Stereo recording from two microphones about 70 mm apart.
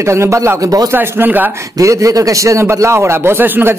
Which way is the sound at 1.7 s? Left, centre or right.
Right.